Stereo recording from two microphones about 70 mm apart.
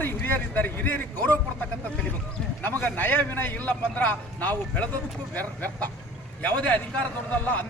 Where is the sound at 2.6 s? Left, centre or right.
Left.